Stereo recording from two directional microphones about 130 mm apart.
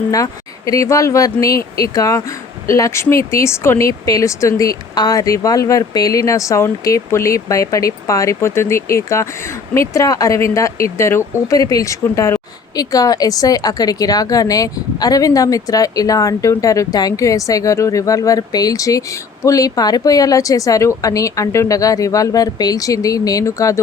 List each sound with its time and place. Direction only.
0.1 s speech: 25° left (ahead or behind)